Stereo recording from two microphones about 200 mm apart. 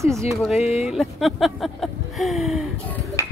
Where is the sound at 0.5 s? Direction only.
30° left (ahead or behind).